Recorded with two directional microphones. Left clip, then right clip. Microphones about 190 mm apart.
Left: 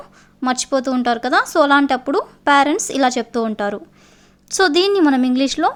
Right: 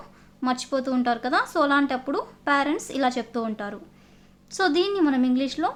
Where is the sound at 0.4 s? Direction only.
35° left (ahead or behind).